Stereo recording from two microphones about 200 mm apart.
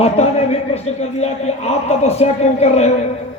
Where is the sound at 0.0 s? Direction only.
30° left (ahead or behind).